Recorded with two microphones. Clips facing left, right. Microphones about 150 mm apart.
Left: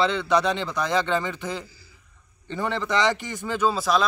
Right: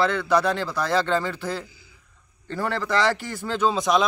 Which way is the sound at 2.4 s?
20° left (ahead or behind).